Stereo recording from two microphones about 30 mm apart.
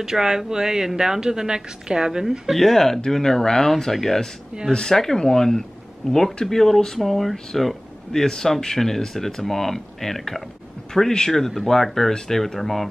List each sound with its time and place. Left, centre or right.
0.0 s a woman's voice: centre
2.5 s speech: centre
7.0 s speech: centre
8.1 s speech: centre
10.9 s speech: left